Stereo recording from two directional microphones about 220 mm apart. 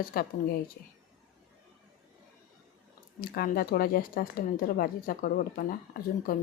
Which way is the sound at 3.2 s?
45° left (ahead or behind).